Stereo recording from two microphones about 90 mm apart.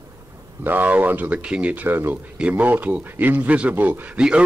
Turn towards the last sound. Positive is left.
turn(degrees=-10)  # may be behind; listen again after turning